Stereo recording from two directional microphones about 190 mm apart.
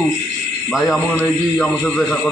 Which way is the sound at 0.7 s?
Centre (ahead or behind).